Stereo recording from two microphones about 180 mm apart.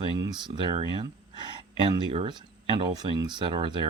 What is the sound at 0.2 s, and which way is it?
Speech, 25° right (ahead or behind).